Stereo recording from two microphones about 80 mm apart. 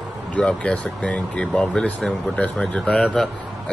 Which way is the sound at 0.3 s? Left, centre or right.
Centre.